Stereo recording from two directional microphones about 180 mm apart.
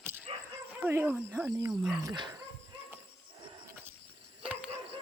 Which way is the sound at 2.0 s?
20° right (ahead or behind).